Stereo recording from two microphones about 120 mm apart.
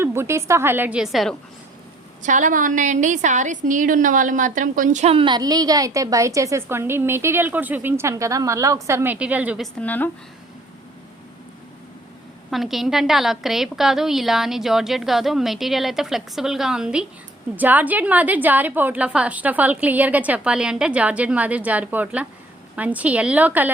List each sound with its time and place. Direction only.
0.0 s a woman's voice: 20° right (ahead or behind); by 1.4 s centre (ahead or behind)
2.2 s a woman's voice: 90° right
5.1 s a woman's voice: 40° right (ahead or behind); by 9.1 s 25° right (ahead or behind)
9.1 s a woman's voice: 10° right (ahead or behind)
9.8 s speech: 15° left (ahead or behind)
12.5 s a woman's voice: centre (ahead or behind)